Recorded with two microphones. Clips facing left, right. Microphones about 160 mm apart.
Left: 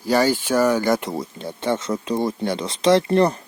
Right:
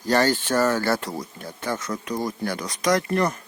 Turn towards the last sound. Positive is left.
turn(degrees=30)  # may be behind; listen again after turning